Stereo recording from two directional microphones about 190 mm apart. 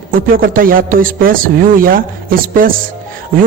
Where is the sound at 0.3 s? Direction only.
50° right (ahead or behind).